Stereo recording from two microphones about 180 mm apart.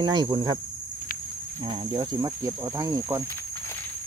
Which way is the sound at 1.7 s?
25° right (ahead or behind).